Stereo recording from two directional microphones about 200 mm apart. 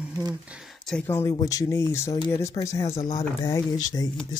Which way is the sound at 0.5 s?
Centre (ahead or behind).